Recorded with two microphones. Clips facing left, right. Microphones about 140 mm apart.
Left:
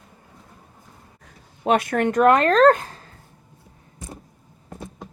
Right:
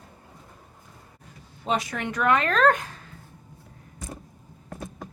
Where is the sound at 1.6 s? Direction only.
60° left (ahead or behind); by 3.1 s 35° left (ahead or behind).